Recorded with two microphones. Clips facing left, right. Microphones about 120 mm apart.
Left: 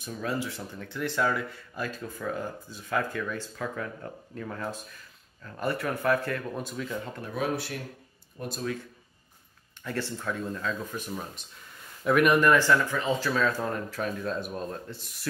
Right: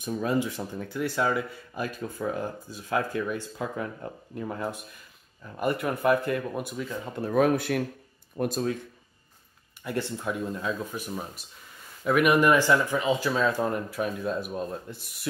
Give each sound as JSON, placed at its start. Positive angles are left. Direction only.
{"t": 0.0, "sound": "speech", "side_deg": -15}
{"t": 7.2, "sound": "speech", "side_deg": -50}
{"t": 9.8, "sound": "speech", "side_deg": -15}
{"t": 12.3, "sound": "speech", "side_deg": -15}